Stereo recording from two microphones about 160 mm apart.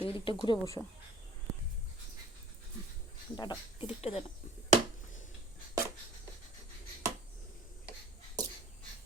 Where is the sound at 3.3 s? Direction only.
25° left (ahead or behind).